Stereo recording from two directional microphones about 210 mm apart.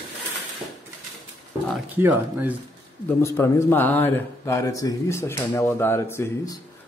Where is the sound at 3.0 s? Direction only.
10° left (ahead or behind).